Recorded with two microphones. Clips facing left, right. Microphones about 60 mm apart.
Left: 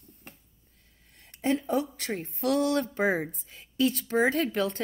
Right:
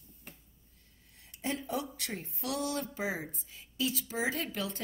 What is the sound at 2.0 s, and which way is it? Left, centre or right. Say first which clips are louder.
Speech: left 8 dB; left.